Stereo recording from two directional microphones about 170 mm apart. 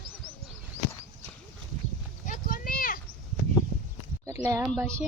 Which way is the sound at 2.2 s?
50° left (ahead or behind).